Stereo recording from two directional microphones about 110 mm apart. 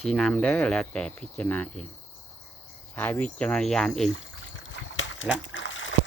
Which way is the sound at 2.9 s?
15° left (ahead or behind).